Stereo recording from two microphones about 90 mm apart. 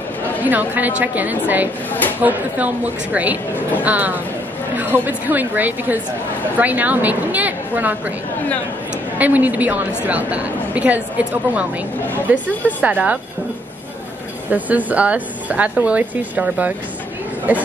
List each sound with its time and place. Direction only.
0.4 s a woman's voice: 20° right (ahead or behind)
9.2 s a woman's voice: 20° right (ahead or behind)
14.5 s a woman's voice: 15° right (ahead or behind)